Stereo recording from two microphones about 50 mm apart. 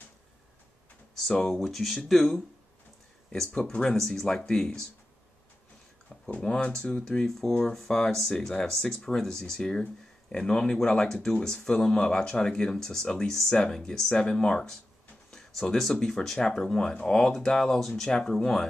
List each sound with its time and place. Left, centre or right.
1.4 s speech: centre
4.3 s speech: centre
6.0 s speech: centre
7.2 s speech: centre
15.3 s a sound: centre
15.9 s speech: centre